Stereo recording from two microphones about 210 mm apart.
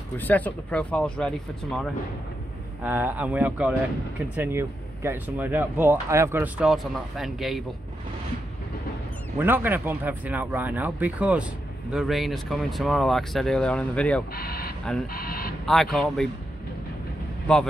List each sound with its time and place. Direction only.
0.2 s speech: 10° left (ahead or behind)
2.8 s speech: 10° right (ahead or behind)
9.4 s speech: 10° right (ahead or behind)
14.3 s speech: 45° left (ahead or behind)
15.6 s speech: centre (ahead or behind)